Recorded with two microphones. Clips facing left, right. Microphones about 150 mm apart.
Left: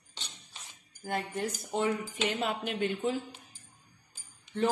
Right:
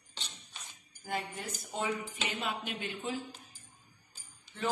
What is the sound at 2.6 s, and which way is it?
Speech, 50° left (ahead or behind).